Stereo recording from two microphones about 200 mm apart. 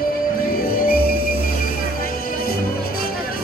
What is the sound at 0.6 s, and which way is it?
Music, 45° left (ahead or behind).